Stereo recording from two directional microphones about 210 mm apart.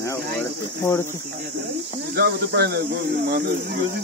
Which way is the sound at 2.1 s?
50° right (ahead or behind).